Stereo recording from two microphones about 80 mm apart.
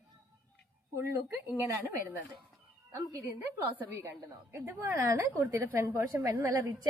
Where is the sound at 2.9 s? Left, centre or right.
Right.